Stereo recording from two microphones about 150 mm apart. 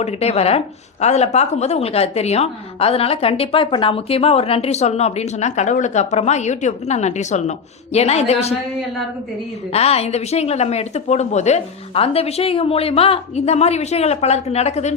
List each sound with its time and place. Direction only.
0.0 s a woman's voice: 45° left (ahead or behind)
9.7 s a woman's voice: 45° left (ahead or behind)